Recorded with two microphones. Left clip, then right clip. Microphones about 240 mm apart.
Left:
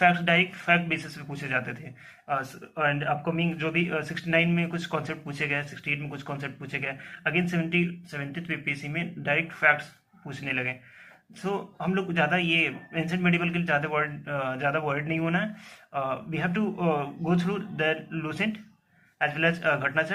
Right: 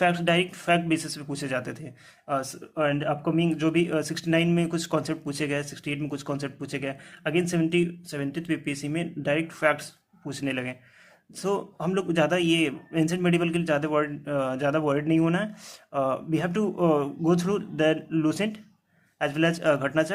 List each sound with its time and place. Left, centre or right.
0.0 s speech: right